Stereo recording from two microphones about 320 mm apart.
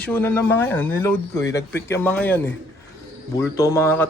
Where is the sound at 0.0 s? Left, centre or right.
Centre.